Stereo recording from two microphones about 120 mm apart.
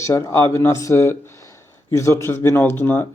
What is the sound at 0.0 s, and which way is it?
Speech, 25° left (ahead or behind).